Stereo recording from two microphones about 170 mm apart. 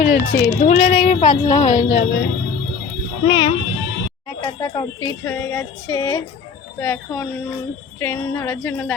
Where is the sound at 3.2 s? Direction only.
25° left (ahead or behind).